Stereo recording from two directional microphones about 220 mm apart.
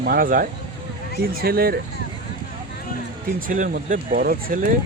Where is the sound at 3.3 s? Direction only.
35° right (ahead or behind).